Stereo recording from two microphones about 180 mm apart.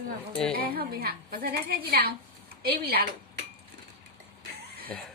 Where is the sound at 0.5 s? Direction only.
55° right (ahead or behind).